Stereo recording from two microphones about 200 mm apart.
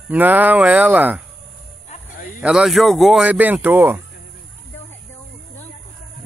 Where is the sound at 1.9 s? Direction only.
45° left (ahead or behind).